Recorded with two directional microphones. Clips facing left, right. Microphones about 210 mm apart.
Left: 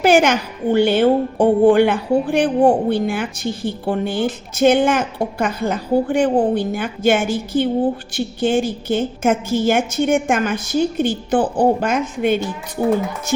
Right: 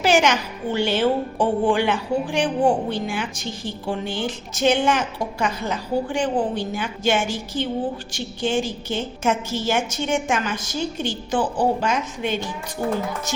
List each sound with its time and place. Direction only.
0.0 s a woman's voice: 55° left (ahead or behind)